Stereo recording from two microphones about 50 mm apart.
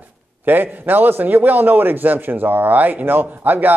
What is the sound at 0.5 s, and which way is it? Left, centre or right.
A man's voice, right.